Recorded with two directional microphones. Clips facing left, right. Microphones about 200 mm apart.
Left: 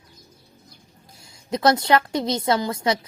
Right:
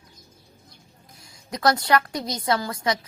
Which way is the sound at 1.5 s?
25° left (ahead or behind).